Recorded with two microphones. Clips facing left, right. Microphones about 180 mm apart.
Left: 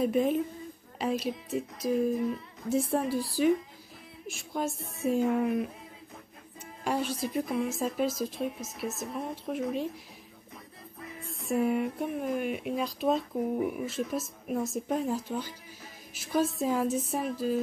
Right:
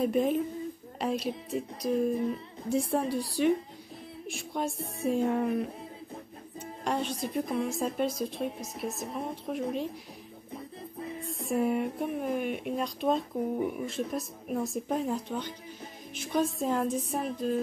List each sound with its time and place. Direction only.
0.0 s speech: centre (ahead or behind)
6.8 s speech: 5° left (ahead or behind)
10.5 s music: 30° right (ahead or behind)
11.2 s speech: centre (ahead or behind)